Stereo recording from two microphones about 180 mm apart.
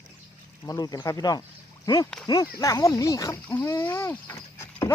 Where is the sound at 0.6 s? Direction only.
20° left (ahead or behind).